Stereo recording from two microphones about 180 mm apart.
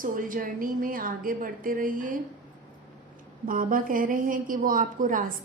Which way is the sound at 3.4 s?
50° right (ahead or behind).